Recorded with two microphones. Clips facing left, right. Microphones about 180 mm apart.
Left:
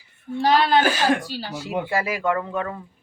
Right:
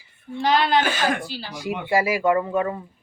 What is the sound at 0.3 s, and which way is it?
A woman's voice, 35° left (ahead or behind).